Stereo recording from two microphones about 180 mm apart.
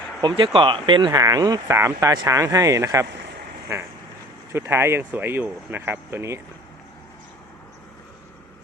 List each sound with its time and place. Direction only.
0.2 s speech: 25° right (ahead or behind)
4.5 s speech: 15° right (ahead or behind)